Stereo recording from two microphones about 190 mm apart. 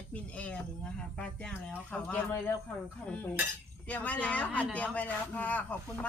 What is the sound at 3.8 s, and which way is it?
Speech, 10° left (ahead or behind).